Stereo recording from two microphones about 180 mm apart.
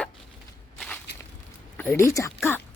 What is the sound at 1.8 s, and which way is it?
Speech, 15° left (ahead or behind).